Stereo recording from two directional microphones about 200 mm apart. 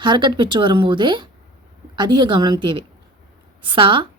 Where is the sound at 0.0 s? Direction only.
25° right (ahead or behind).